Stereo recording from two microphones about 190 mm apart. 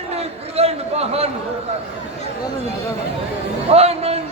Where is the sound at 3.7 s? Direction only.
35° right (ahead or behind).